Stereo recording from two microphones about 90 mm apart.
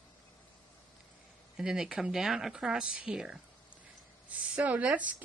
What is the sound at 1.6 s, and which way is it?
Speech, 10° right (ahead or behind).